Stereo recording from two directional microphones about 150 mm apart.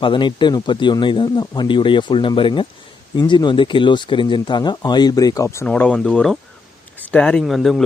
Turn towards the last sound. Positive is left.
turn(degrees=0)  # may be behind; listen again after turning